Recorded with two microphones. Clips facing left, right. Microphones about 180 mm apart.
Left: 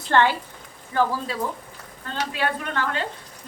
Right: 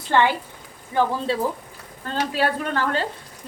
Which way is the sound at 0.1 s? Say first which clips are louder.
Even; 10° right (ahead or behind).